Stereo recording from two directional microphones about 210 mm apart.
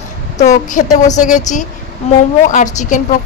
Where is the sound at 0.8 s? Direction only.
40° left (ahead or behind).